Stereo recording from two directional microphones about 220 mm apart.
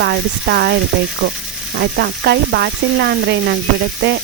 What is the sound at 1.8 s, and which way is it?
Sizzle, 50° right (ahead or behind).